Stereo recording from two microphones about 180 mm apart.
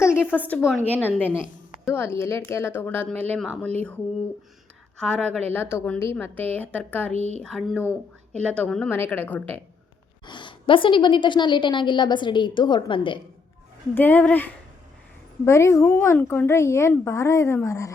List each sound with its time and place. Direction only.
0.0 s a woman's voice: 10° left (ahead or behind)
4.9 s speech: 5° left (ahead or behind)
7.1 s speech: 35° right (ahead or behind)
7.4 s speech: 5° left (ahead or behind)
10.2 s a woman's voice: 25° left (ahead or behind)
13.9 s speech: 10° left (ahead or behind)